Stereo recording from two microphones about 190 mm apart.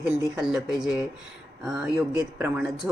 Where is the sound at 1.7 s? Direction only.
5° right (ahead or behind).